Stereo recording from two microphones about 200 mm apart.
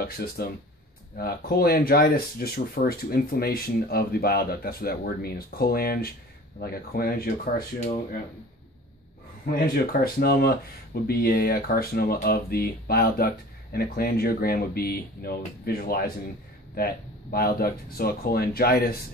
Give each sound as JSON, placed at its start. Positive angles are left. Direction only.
{"t": 0.0, "sound": "speech", "side_deg": 50}
{"t": 9.9, "sound": "speech", "side_deg": 50}